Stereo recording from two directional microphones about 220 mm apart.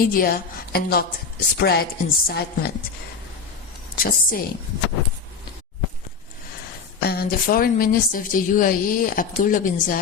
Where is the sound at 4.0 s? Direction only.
40° left (ahead or behind).